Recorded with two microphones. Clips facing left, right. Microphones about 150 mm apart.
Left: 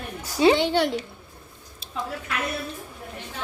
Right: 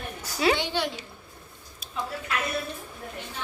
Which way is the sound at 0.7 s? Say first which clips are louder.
Left 7 dB; 60° left (ahead or behind).